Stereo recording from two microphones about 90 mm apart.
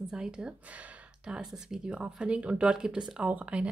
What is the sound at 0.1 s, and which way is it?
Speech, 10° right (ahead or behind).